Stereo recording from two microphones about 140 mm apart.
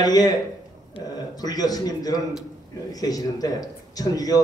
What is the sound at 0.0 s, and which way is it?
A man's voice, 30° left (ahead or behind).